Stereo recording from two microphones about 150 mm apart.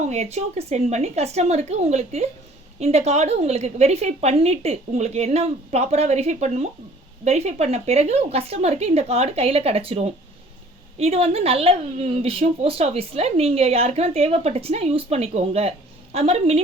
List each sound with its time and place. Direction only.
0.1 s a woman's voice: 45° right (ahead or behind)